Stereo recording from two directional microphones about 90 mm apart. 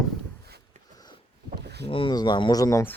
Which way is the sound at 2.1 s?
55° left (ahead or behind).